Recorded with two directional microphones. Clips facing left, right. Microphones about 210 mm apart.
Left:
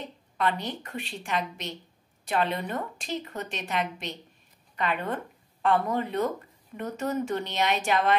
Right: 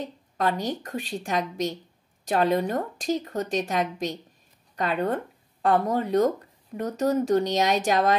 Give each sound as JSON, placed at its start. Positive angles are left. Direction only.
{"t": 0.0, "sound": "speech", "side_deg": -40}